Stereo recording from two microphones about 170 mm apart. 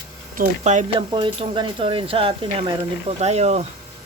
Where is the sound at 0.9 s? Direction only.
30° right (ahead or behind).